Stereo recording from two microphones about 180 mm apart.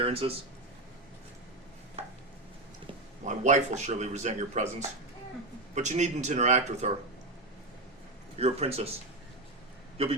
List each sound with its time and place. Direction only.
0.0 s speech: 30° right (ahead or behind)
3.2 s speech: 40° right (ahead or behind)
8.4 s speech: 35° right (ahead or behind)